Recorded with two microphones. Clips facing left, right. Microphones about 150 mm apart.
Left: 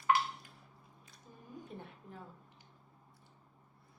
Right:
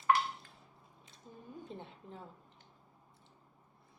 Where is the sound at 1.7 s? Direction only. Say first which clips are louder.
Right 2 dB; 25° right (ahead or behind).